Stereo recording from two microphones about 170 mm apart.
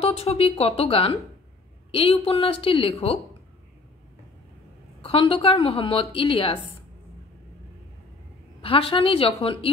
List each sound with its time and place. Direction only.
0.0 s a woman's voice: 35° left (ahead or behind)
5.0 s a woman's voice: 35° left (ahead or behind)
8.5 s a woman's voice: 30° left (ahead or behind)